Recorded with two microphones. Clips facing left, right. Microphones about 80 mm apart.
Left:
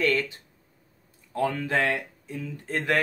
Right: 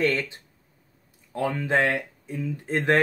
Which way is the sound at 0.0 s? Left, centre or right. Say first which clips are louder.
Even; right.